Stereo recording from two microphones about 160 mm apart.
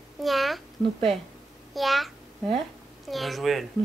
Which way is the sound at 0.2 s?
Centre (ahead or behind).